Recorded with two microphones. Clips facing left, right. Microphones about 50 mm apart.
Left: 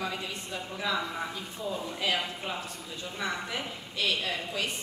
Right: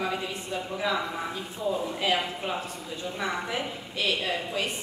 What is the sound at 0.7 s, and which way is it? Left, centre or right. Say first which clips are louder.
A woman's voice: right 2 dB; centre.